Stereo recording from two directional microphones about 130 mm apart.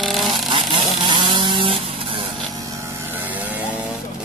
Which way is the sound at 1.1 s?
35° right (ahead or behind).